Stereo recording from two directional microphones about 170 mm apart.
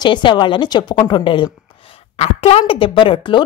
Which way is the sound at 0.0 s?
30° left (ahead or behind).